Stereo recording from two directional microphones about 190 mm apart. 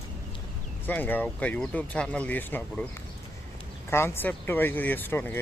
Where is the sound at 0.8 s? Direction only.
10° left (ahead or behind).